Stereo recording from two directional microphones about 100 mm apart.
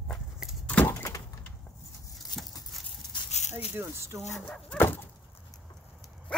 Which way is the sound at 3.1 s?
50° left (ahead or behind).